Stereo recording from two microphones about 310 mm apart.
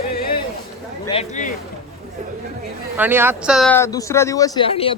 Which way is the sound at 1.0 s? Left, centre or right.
Left.